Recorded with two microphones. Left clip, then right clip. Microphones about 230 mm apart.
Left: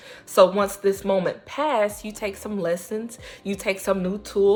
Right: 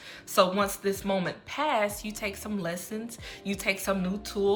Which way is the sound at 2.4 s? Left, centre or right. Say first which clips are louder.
Left 6 dB; left.